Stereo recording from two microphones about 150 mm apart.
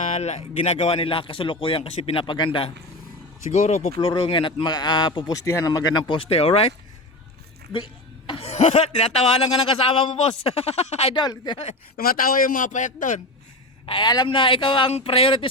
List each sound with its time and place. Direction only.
0.1 s a man's voice: 50° left (ahead or behind)
3.5 s speech: 50° left (ahead or behind)
3.9 s a man's voice: 35° left (ahead or behind)
8.3 s speech: 45° left (ahead or behind)
11.1 s speech: 30° left (ahead or behind)
11.9 s a man's voice: 75° left (ahead or behind); by 13.2 s 55° left (ahead or behind)
13.8 s a man's voice: 30° left (ahead or behind)